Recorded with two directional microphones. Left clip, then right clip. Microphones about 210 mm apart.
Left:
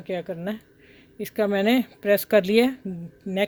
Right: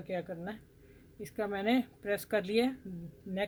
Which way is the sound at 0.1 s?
45° left (ahead or behind).